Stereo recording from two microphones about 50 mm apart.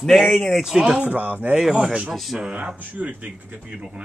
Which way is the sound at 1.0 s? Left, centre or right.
Right.